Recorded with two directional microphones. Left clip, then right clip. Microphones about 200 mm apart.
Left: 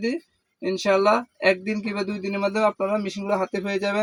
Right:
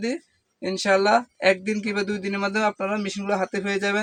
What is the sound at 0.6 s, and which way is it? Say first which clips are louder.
Speech: even; 20° right (ahead or behind).